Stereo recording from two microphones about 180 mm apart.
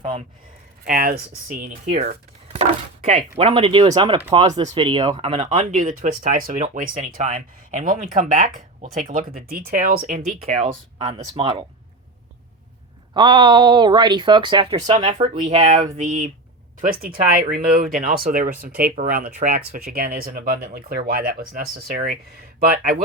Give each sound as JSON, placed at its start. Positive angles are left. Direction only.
{"t": 0.9, "sound": "speech", "side_deg": -55}
{"t": 1.9, "sound": "speech", "side_deg": -40}
{"t": 10.9, "sound": "speech", "side_deg": -30}
{"t": 13.1, "sound": "speech", "side_deg": -25}
{"t": 15.6, "sound": "speech", "side_deg": -45}